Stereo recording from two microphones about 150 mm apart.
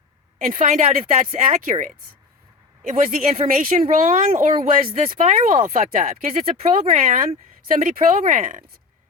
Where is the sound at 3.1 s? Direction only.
60° right (ahead or behind).